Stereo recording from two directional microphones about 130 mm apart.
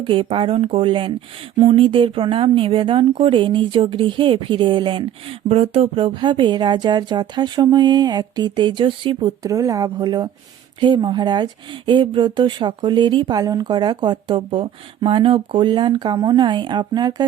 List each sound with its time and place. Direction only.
0.0 s speech: 40° right (ahead or behind)
9.4 s a woman's voice: 25° right (ahead or behind)